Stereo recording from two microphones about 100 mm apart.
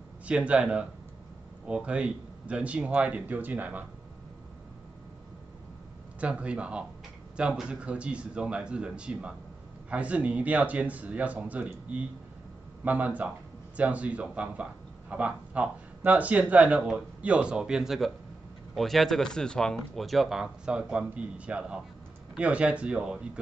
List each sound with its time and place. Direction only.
0.3 s speech: 10° right (ahead or behind)
6.1 s a man's voice: 15° right (ahead or behind)